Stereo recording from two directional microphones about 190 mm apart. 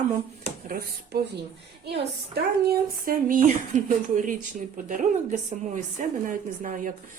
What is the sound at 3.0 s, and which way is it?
A woman's voice, 45° right (ahead or behind).